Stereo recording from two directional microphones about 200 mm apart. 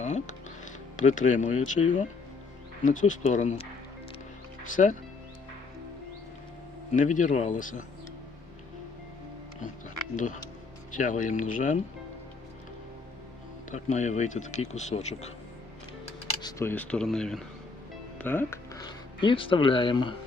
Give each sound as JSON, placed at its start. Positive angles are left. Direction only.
{"t": 0.0, "sound": "speech", "side_deg": 35}
{"t": 6.9, "sound": "speech", "side_deg": 40}
{"t": 10.2, "sound": "speech", "side_deg": 40}
{"t": 13.7, "sound": "speech", "side_deg": 35}
{"t": 16.2, "sound": "speech", "side_deg": 20}